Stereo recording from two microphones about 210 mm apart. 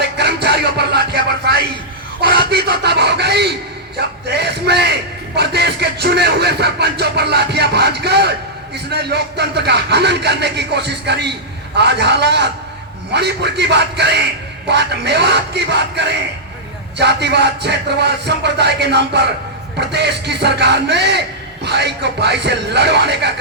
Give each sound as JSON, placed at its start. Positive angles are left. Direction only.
{"t": 0.0, "sound": "music", "side_deg": -50}
{"t": 2.5, "sound": "a sound", "side_deg": -50}
{"t": 3.9, "sound": "speech", "side_deg": -50}